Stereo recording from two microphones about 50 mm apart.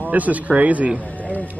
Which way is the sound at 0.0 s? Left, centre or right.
Right.